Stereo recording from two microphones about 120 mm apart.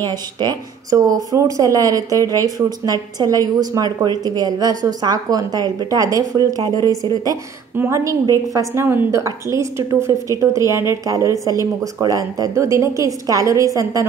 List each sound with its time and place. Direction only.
0.0 s speech: 35° right (ahead or behind)
7.7 s a woman's voice: 20° right (ahead or behind)